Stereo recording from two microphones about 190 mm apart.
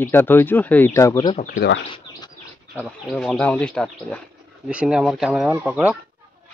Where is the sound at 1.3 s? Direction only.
45° left (ahead or behind).